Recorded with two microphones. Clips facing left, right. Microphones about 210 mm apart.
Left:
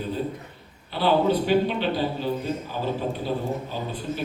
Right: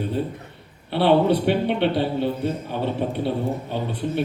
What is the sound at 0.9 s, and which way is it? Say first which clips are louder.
A man's voice: right 4 dB; 65° right (ahead or behind).